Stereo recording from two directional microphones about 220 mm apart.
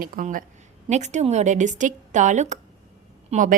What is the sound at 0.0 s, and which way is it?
A woman's voice, 40° right (ahead or behind).